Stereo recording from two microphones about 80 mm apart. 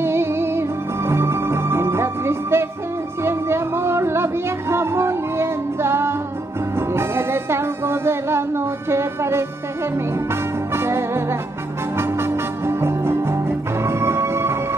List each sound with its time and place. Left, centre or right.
0.0 s music: right
10.7 s music: right